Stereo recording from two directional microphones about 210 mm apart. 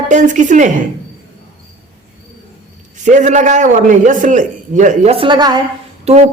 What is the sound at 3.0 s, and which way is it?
A woman's voice, 35° right (ahead or behind).